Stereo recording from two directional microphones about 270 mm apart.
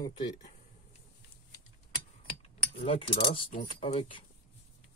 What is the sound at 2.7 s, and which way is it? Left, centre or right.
Speech, left.